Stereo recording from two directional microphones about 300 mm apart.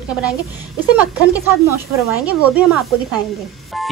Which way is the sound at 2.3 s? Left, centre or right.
Centre.